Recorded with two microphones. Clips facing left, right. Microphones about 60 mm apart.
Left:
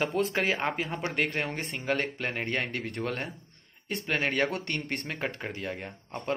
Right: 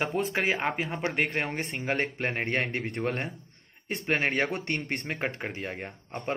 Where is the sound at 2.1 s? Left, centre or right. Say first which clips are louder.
Right 2 dB; right.